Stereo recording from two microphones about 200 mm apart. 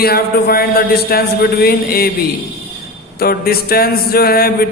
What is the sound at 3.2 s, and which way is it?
A man's voice, 50° left (ahead or behind).